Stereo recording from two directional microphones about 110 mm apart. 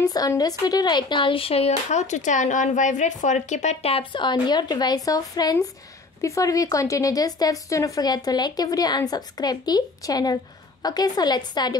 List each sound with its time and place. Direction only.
0.0 s speech: 35° left (ahead or behind); by 4.0 s 80° left
4.1 s a woman's voice: 45° left (ahead or behind)